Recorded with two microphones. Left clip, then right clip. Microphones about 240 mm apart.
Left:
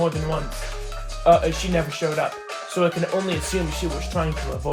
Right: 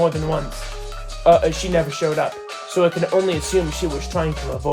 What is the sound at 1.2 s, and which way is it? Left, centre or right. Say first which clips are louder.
Speech: right 3 dB; right.